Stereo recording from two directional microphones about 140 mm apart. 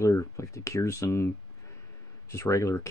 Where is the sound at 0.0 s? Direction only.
20° left (ahead or behind).